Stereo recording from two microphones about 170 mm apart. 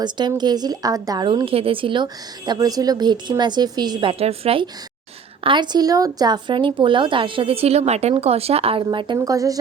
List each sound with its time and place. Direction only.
0.0 s a woman's voice: 25° right (ahead or behind)